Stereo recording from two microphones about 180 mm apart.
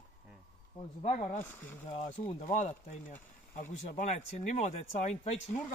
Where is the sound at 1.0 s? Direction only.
40° left (ahead or behind).